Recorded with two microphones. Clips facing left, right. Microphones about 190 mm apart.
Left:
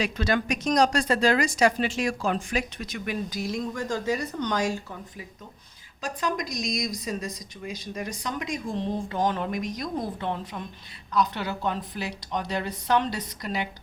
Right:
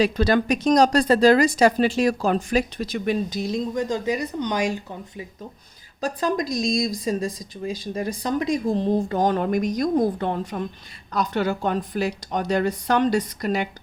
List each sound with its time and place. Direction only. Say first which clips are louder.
0.0 s a woman's voice: right 7 dB; 35° right (ahead or behind)
6.0 s a woman's voice: right 6 dB; 35° right (ahead or behind)